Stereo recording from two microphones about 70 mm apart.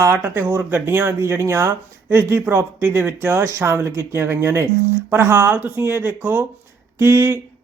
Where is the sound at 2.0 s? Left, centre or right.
Right.